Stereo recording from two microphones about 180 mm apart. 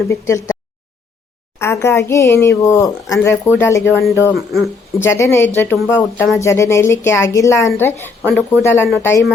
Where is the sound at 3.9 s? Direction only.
Centre (ahead or behind).